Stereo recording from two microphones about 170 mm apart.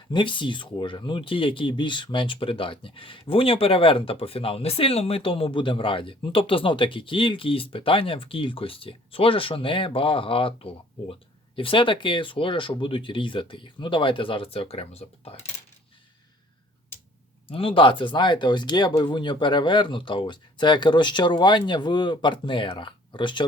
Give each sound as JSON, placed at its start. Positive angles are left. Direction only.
{"t": 0.1, "sound": "speech", "side_deg": 30}
{"t": 17.5, "sound": "speech", "side_deg": 30}